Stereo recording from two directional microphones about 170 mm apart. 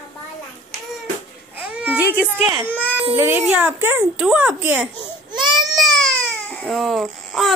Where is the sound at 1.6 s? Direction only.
5° right (ahead or behind).